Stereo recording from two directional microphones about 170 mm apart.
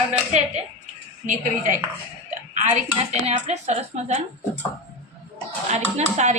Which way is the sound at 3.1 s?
40° right (ahead or behind).